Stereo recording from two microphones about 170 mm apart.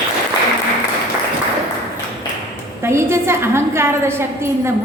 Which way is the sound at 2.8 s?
15° right (ahead or behind).